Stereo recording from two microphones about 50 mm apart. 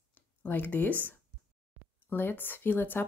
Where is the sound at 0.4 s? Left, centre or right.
Left.